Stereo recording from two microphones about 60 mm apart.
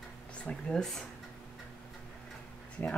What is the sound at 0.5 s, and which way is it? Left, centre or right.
Speech, centre.